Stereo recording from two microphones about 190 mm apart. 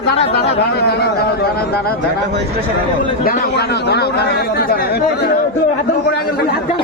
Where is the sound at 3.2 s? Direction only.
55° left (ahead or behind).